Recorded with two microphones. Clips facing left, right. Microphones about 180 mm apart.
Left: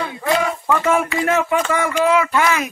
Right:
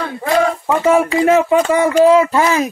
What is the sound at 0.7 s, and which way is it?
Speech, 25° right (ahead or behind).